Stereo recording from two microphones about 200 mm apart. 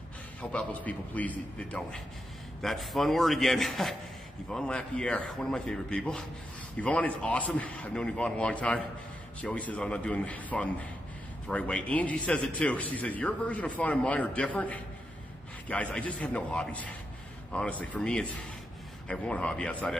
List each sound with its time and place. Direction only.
0.4 s a man's voice: 5° left (ahead or behind)